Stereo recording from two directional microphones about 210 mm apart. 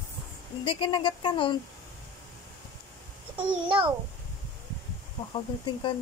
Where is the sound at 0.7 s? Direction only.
25° left (ahead or behind).